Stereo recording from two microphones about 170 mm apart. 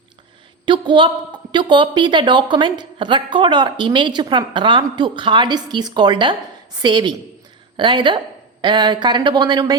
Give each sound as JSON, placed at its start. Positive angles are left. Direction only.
{"t": 0.6, "sound": "a woman's voice", "side_deg": -30}